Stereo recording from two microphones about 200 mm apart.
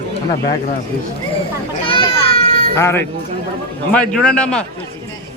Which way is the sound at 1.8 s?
25° left (ahead or behind).